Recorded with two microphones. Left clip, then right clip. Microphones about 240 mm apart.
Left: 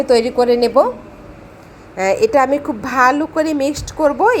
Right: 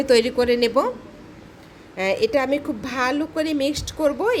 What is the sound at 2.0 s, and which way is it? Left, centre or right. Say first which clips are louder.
A woman's voice: left 7 dB; centre.